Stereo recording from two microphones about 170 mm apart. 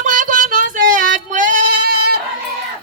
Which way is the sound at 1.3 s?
50° right (ahead or behind).